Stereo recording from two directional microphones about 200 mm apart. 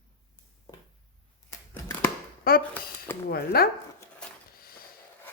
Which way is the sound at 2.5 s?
50° left (ahead or behind).